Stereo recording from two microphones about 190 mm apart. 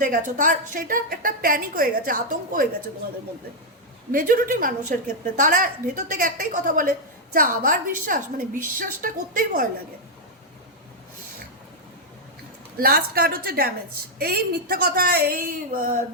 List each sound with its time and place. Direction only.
0.0 s a woman's voice: 45° right (ahead or behind)
4.1 s a woman's voice: 45° right (ahead or behind)
12.7 s a woman's voice: 55° right (ahead or behind)